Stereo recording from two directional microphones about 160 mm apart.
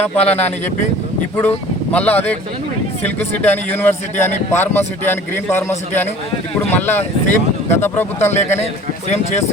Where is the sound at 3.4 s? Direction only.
10° left (ahead or behind).